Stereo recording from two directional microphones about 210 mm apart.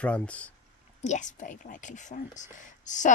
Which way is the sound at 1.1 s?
35° left (ahead or behind).